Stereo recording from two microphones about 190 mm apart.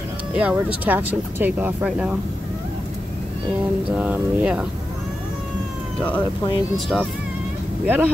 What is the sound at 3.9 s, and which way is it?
Speech, 5° right (ahead or behind).